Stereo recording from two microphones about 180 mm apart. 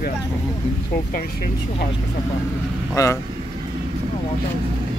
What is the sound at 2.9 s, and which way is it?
Speech, 15° left (ahead or behind).